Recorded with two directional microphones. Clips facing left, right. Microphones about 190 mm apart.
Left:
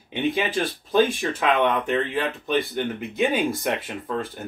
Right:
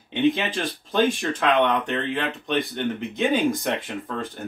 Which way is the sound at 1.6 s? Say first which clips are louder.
Even; centre (ahead or behind).